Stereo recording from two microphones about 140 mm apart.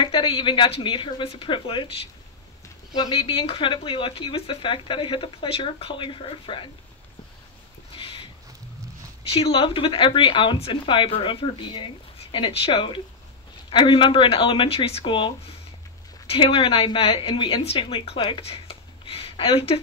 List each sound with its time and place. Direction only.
0.0 s speech: 35° left (ahead or behind)
2.9 s speech: 30° left (ahead or behind)
7.9 s a sound: 40° left (ahead or behind)
9.3 s speech: 40° left (ahead or behind)